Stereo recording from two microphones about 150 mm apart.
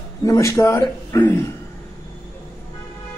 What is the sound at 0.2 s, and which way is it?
Speech, 20° left (ahead or behind).